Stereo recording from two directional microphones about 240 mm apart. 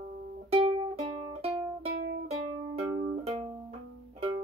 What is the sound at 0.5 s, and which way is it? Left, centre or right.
Music, right.